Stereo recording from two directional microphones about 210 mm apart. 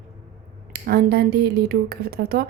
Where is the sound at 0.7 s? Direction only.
50° right (ahead or behind).